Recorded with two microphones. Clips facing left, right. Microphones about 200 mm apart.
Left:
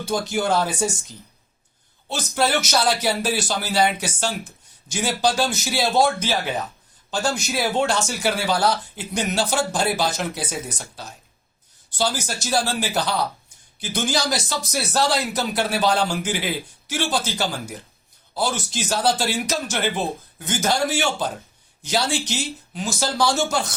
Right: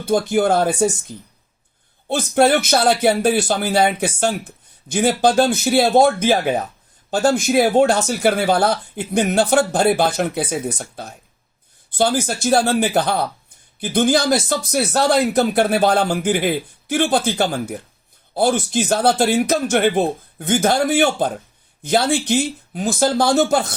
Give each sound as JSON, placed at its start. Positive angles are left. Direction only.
{"t": 0.0, "sound": "speech", "side_deg": -55}
{"t": 8.0, "sound": "speech", "side_deg": -55}